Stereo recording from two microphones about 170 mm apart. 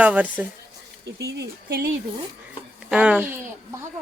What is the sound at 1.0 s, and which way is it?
Speech, 85° right.